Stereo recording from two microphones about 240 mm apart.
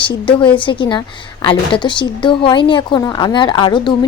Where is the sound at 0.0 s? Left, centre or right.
Left.